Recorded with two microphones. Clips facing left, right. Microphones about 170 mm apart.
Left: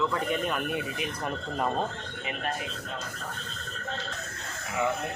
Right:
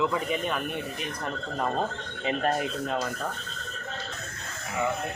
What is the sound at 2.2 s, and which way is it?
Speech, 30° right (ahead or behind).